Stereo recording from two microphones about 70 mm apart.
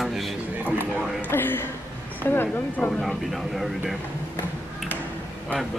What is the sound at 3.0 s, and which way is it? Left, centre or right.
Speech, centre.